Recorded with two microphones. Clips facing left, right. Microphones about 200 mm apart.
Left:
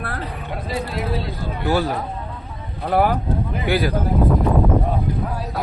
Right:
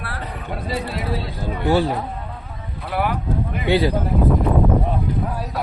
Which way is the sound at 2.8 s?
40° left (ahead or behind).